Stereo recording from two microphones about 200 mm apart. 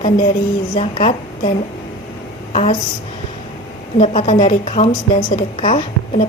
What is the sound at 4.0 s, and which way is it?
A woman's voice, 30° left (ahead or behind).